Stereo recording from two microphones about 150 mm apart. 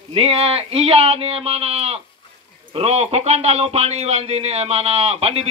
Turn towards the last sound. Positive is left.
turn(degrees=-40)  # may be behind; listen again after turning